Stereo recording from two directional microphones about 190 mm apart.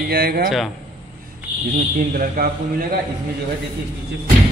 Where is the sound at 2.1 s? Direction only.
50° right (ahead or behind).